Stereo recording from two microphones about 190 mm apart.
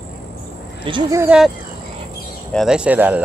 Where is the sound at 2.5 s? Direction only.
5° right (ahead or behind).